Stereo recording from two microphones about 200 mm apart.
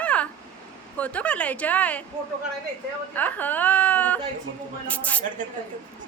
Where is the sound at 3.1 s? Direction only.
10° left (ahead or behind).